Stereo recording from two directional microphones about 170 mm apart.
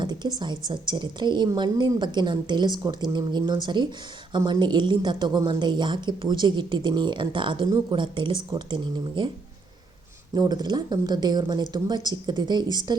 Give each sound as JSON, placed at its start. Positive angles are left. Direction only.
{"t": 0.0, "sound": "speech", "side_deg": -25}
{"t": 10.3, "sound": "speech", "side_deg": -25}